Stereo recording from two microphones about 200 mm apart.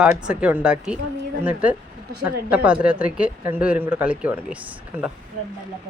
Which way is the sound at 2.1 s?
50° right (ahead or behind).